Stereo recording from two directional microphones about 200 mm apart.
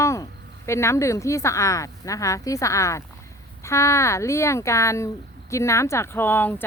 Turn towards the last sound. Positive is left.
turn(degrees=10)  # may be behind; listen again after turning